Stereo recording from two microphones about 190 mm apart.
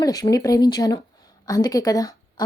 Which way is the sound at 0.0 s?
20° left (ahead or behind).